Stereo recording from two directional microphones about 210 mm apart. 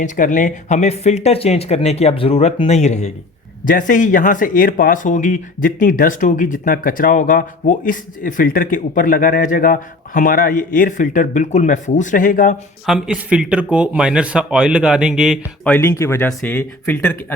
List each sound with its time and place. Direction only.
0.0 s speech: 40° left (ahead or behind)
12.8 s speech: 5° right (ahead or behind)
15.7 s speech: 10° left (ahead or behind)